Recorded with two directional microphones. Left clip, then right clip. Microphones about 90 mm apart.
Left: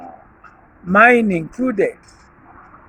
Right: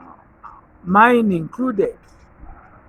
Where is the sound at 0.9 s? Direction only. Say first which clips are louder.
Left 2 dB; 20° right (ahead or behind).